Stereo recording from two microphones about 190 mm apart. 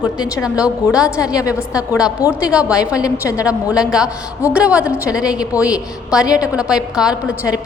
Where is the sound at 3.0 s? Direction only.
15° left (ahead or behind).